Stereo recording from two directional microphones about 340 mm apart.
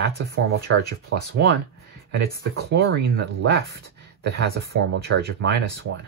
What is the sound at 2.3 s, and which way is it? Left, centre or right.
Speech, right.